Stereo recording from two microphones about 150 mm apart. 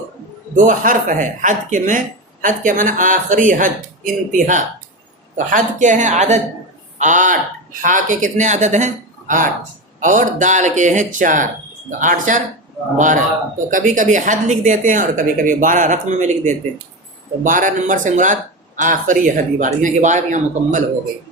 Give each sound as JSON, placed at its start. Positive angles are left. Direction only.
{"t": 0.5, "sound": "a woman's voice", "side_deg": -60}